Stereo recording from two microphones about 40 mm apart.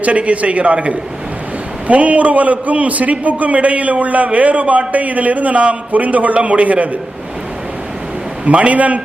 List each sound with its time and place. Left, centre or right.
0.0 s a man's voice: right
8.4 s a man's voice: right